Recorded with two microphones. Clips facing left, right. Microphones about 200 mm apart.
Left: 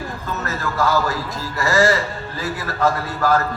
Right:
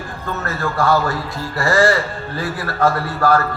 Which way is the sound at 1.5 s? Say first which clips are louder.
Right 2 dB; 40° left (ahead or behind).